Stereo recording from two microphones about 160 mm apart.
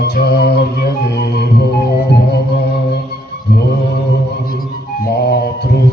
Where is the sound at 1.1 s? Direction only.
90° left.